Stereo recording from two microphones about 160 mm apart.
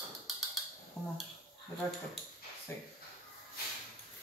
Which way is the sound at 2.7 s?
15° left (ahead or behind).